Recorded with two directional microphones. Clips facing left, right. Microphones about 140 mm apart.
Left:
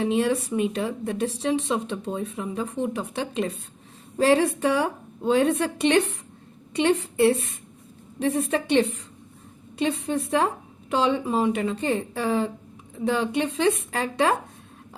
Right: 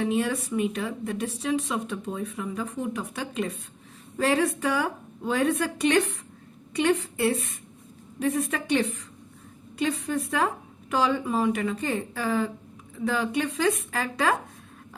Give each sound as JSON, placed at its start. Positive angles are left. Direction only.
{"t": 0.0, "sound": "speech", "side_deg": 30}